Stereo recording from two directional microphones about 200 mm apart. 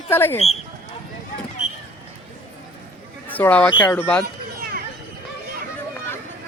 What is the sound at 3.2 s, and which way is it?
Speech, 10° left (ahead or behind).